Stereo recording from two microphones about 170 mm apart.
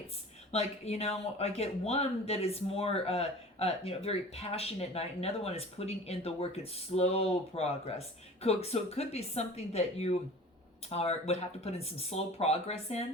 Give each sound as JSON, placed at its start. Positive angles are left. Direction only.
{"t": 0.5, "sound": "a man's voice", "side_deg": 40}